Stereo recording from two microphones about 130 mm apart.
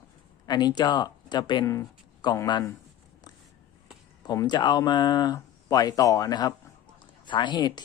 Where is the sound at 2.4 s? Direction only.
30° left (ahead or behind).